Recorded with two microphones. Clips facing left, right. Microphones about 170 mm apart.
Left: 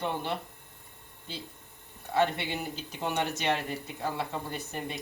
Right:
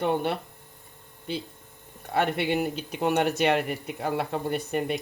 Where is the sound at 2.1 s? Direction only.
60° right (ahead or behind).